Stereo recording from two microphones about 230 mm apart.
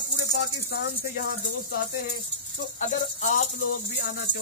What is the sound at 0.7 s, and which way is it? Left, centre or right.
Speech, left.